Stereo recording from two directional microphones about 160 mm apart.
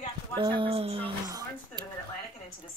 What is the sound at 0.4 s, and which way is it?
Speech, 30° right (ahead or behind).